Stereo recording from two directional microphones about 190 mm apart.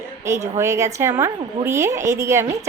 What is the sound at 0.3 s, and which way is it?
A woman's voice, 15° right (ahead or behind).